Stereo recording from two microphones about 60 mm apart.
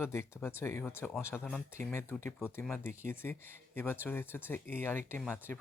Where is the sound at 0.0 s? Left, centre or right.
Left.